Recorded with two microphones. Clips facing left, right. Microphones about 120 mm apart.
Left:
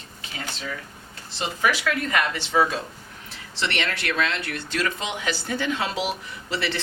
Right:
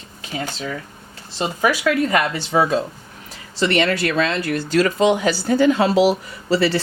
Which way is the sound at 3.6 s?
40° right (ahead or behind).